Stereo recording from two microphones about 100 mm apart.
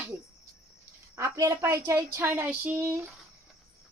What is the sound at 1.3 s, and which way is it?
A woman's voice, 35° right (ahead or behind).